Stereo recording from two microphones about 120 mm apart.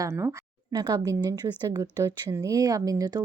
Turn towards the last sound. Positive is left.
turn(degrees=-30)  # may be behind; listen again after turning